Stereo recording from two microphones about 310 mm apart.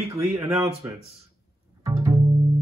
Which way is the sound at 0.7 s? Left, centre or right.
Centre.